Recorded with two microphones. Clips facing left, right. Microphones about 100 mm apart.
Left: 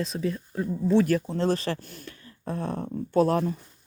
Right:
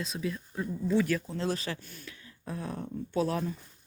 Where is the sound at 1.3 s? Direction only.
50° left (ahead or behind).